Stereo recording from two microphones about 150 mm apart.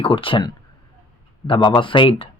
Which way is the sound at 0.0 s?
35° left (ahead or behind).